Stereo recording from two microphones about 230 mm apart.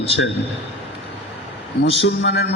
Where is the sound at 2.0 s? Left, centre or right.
Left.